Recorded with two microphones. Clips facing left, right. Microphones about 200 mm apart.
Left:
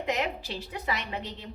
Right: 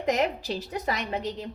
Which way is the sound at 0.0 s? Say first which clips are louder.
Right 5 dB; 40° right (ahead or behind).